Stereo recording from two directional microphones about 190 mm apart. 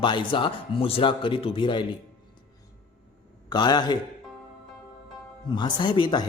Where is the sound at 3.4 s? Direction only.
20° left (ahead or behind).